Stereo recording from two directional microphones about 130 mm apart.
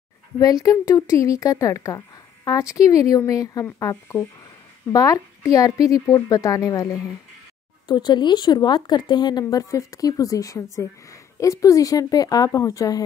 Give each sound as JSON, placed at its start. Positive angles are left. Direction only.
{"t": 0.4, "sound": "speech", "side_deg": 25}